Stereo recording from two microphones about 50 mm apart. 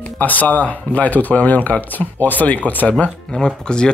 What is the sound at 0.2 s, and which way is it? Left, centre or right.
Speech, left.